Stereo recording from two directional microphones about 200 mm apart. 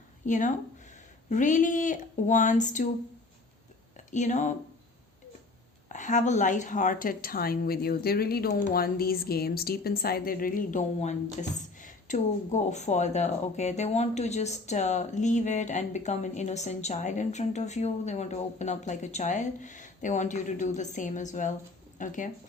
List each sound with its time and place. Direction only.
0.3 s a woman's voice: 40° left (ahead or behind)
3.9 s speech: 35° left (ahead or behind)
5.9 s a woman's voice: 40° left (ahead or behind)